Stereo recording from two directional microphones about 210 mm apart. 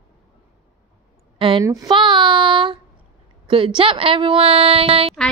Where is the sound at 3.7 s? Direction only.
25° right (ahead or behind).